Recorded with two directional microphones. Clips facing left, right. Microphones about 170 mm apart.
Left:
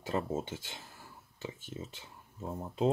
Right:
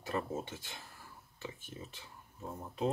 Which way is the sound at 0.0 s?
25° left (ahead or behind).